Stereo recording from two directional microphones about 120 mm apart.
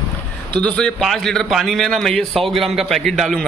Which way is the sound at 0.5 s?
10° left (ahead or behind).